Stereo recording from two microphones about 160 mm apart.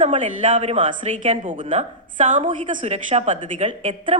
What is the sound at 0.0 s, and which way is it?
A woman's voice, 45° right (ahead or behind).